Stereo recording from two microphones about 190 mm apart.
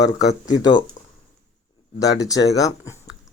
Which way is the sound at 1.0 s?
40° left (ahead or behind).